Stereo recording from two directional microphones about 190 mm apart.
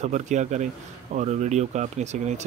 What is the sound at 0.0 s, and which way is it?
Speech, 40° right (ahead or behind).